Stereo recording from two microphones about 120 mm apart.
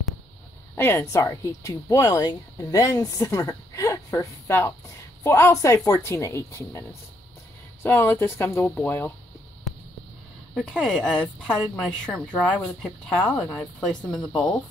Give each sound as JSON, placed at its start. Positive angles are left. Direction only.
{"t": 0.7, "sound": "speech", "side_deg": 20}
{"t": 10.5, "sound": "speech", "side_deg": 0}